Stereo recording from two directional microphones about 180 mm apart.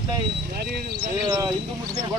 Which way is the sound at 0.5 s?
60° right (ahead or behind).